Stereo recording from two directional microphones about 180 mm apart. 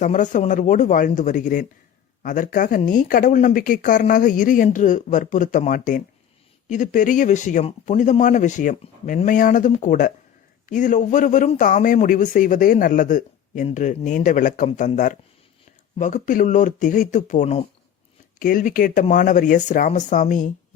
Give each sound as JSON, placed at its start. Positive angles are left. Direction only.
{"t": 0.0, "sound": "speech", "side_deg": 45}